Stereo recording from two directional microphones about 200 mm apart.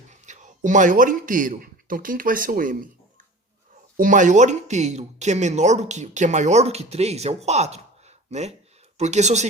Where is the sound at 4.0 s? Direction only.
40° right (ahead or behind).